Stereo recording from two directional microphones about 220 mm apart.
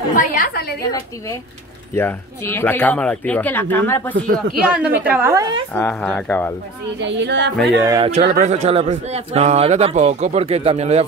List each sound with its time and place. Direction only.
0.1 s a woman's voice: 35° left (ahead or behind)
2.0 s speech: 10° left (ahead or behind)
4.6 s a woman's voice: 5° right (ahead or behind)
5.8 s speech: 5° left (ahead or behind)
7.0 s a woman's voice: 55° right (ahead or behind)
7.7 s a woman's voice: 15° right (ahead or behind)
8.4 s speech: 30° right (ahead or behind)